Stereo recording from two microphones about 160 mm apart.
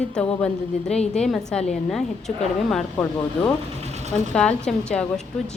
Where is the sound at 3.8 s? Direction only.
45° right (ahead or behind).